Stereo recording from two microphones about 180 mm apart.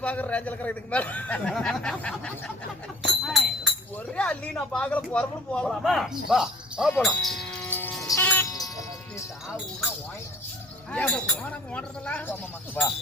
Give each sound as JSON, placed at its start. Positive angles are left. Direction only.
{"t": 0.0, "sound": "a man's voice", "side_deg": 10}
{"t": 3.1, "sound": "a sound", "side_deg": 0}
{"t": 3.9, "sound": "speech", "side_deg": 5}
{"t": 7.7, "sound": "music", "side_deg": 10}
{"t": 10.9, "sound": "a man's voice", "side_deg": 5}